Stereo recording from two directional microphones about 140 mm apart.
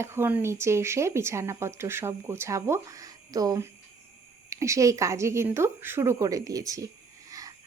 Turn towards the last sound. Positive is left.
turn(degrees=-25)  # may be behind; listen again after turning